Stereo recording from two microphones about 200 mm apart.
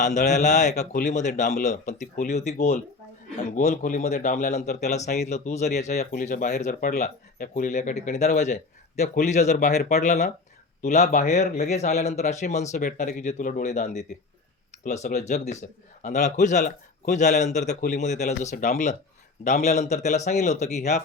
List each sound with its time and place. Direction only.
0.0 s speech: 35° left (ahead or behind)